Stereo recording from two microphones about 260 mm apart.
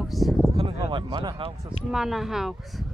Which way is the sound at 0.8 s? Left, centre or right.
Centre.